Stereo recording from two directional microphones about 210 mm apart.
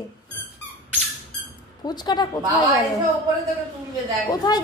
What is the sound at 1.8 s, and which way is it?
Speech, 20° left (ahead or behind).